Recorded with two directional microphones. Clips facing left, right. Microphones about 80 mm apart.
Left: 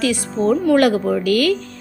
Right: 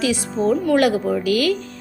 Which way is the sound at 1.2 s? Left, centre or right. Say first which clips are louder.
Left 3 dB; left.